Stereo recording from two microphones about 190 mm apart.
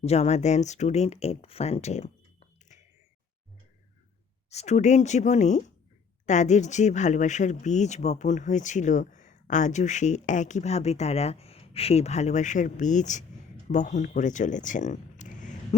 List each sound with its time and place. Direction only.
0.0 s speech: 35° left (ahead or behind)
4.4 s speech: 35° left (ahead or behind)